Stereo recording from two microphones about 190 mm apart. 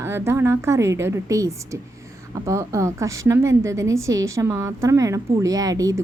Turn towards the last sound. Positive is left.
turn(degrees=-20)  # may be behind; listen again after turning